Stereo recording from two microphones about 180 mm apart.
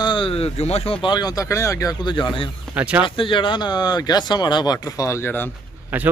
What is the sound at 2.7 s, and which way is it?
Speech, 10° right (ahead or behind).